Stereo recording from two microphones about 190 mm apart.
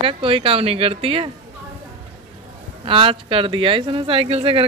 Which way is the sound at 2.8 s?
30° right (ahead or behind).